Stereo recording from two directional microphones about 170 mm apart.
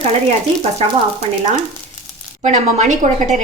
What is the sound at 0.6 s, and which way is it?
A woman's voice, 40° right (ahead or behind).